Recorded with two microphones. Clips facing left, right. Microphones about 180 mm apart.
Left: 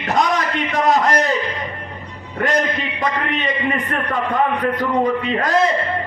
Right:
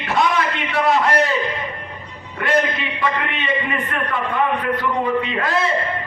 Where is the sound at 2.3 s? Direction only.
40° left (ahead or behind).